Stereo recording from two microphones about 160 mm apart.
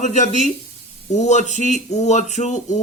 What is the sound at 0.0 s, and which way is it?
Speech, 45° left (ahead or behind).